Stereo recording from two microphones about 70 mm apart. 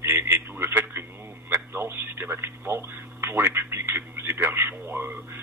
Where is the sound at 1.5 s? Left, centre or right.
Right.